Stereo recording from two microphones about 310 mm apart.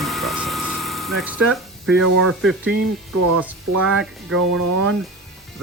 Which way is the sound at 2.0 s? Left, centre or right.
Right.